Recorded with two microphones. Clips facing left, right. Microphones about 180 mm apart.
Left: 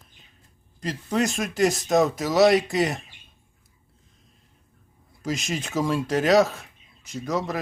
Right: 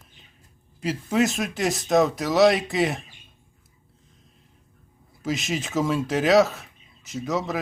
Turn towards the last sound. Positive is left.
turn(degrees=0)  # may be behind; listen again after turning